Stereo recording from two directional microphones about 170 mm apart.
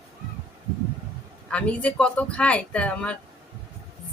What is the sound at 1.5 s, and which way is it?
Speech, 5° left (ahead or behind).